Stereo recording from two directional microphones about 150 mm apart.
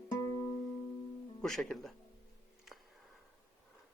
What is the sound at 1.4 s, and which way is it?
Speech, 5° left (ahead or behind).